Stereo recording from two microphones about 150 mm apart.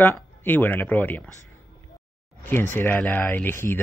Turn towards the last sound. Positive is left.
turn(degrees=15)  # may be behind; listen again after turning